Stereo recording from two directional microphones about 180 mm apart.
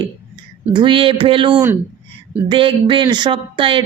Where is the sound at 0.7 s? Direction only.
25° right (ahead or behind).